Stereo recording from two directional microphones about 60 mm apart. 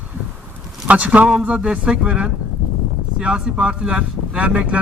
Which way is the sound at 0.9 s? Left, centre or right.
Right.